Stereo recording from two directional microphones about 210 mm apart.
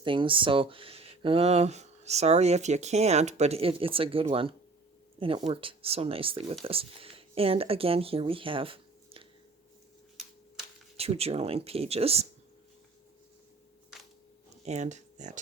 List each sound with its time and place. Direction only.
0.0 s speech: 25° right (ahead or behind)
10.9 s speech: 30° right (ahead or behind)
14.6 s speech: 35° right (ahead or behind)